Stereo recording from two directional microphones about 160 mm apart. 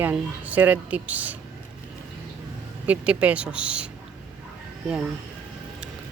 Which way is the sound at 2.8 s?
10° right (ahead or behind).